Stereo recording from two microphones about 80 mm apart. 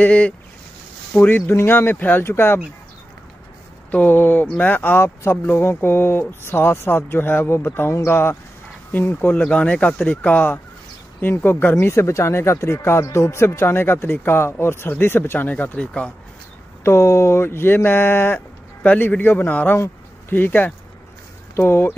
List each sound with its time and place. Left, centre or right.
0.0 s speech: centre
3.9 s speech: left
9.4 s speech: centre
16.8 s speech: left